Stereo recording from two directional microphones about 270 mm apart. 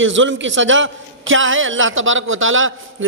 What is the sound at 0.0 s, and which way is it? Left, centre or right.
A man's voice, right.